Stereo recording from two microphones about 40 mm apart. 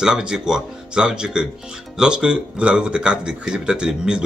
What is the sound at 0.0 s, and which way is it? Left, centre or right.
Speech, centre.